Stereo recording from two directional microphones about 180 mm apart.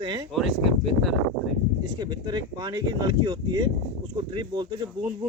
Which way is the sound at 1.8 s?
25° right (ahead or behind).